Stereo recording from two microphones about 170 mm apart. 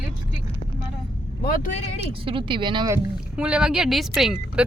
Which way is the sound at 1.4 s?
55° left (ahead or behind).